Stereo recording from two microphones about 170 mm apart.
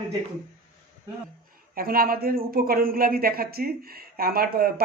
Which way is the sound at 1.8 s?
60° right (ahead or behind).